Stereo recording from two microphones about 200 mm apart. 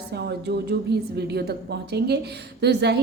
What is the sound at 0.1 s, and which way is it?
A woman's voice, 55° right (ahead or behind).